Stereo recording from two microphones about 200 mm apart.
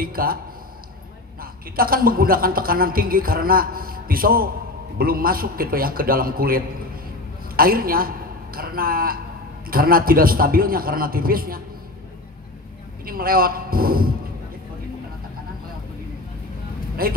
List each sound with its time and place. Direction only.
0.0 s a woman's voice: 45° right (ahead or behind)
1.4 s a woman's voice: 45° right (ahead or behind)
13.0 s a man's voice: 45° right (ahead or behind)
17.0 s a woman's voice: 45° right (ahead or behind)